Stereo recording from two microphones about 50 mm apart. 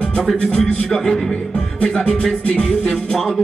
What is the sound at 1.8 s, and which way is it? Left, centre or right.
Music, centre.